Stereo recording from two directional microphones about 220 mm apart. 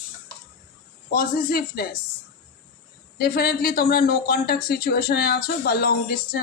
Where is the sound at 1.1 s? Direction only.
40° left (ahead or behind).